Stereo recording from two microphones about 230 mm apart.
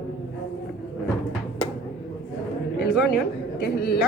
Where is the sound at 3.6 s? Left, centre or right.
Left.